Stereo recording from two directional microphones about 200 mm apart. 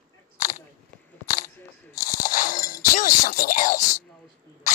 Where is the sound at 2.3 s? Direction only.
45° left (ahead or behind).